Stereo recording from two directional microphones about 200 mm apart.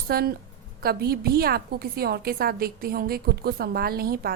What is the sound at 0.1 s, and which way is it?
A woman's voice, 50° right (ahead or behind).